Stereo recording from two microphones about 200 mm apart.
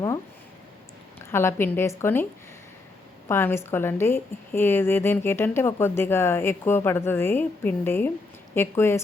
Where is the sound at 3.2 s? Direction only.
10° left (ahead or behind).